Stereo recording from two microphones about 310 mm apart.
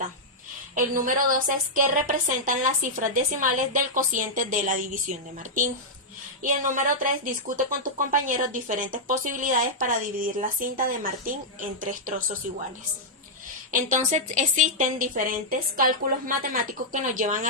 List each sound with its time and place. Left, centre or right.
0.8 s speech: right
6.4 s speech: right
13.7 s speech: right